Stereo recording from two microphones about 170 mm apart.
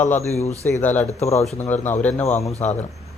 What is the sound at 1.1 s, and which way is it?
Speech, 40° left (ahead or behind).